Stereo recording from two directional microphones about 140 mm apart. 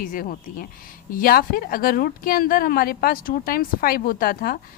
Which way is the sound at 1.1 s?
90° left.